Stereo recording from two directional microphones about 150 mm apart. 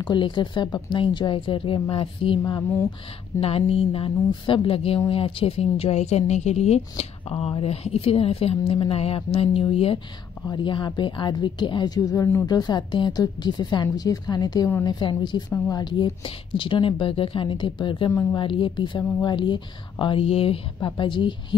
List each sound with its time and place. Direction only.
0.0 s a woman's voice: 30° left (ahead or behind)